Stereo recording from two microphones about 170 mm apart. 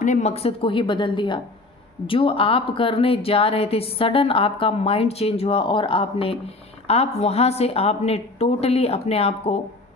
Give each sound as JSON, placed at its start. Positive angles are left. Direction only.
{"t": 0.0, "sound": "a woman's voice", "side_deg": 45}